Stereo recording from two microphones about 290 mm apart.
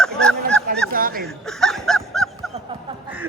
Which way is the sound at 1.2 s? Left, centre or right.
Centre.